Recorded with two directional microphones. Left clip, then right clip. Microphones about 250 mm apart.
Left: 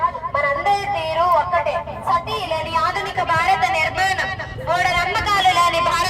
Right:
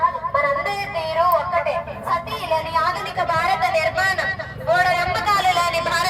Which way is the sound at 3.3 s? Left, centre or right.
Centre.